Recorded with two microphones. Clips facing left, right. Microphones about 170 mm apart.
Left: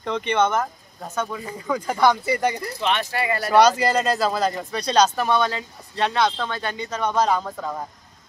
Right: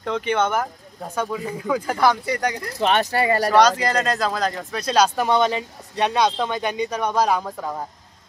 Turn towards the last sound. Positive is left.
turn(degrees=-10)  # may be behind; listen again after turning